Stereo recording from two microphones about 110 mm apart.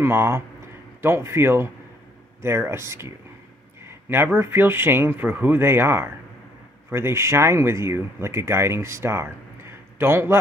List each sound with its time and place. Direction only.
0.0 s speech: 20° right (ahead or behind)